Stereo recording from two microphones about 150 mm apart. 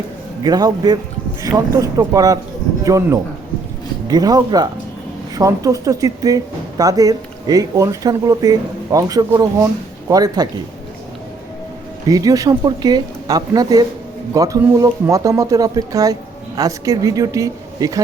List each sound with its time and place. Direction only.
0.4 s speech: 25° right (ahead or behind)
12.0 s speech: 25° right (ahead or behind)